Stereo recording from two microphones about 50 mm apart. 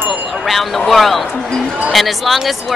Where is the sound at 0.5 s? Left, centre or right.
Centre.